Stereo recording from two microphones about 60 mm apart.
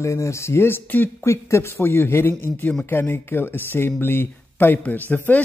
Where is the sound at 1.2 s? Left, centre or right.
Left.